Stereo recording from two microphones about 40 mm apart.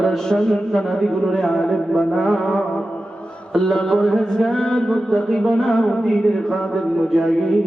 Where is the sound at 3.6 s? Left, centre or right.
Centre.